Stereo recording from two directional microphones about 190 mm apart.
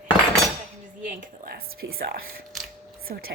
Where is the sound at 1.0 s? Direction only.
50° right (ahead or behind).